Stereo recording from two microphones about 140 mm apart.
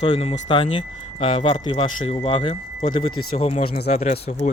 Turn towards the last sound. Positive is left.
turn(degrees=55)  # may be behind; listen again after turning